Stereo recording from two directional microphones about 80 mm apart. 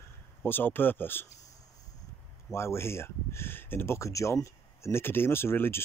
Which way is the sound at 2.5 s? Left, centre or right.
Left.